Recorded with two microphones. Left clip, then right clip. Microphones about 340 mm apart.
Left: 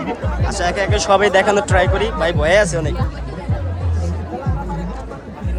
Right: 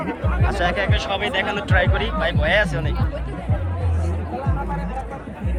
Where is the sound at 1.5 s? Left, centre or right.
Centre.